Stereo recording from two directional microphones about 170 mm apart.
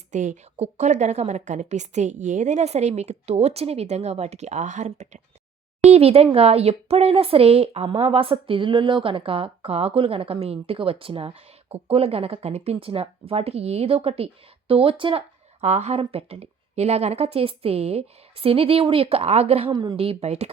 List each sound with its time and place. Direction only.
0.1 s a woman's voice: 45° right (ahead or behind)